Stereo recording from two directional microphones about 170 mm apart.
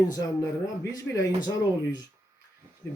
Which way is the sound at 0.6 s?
20° left (ahead or behind).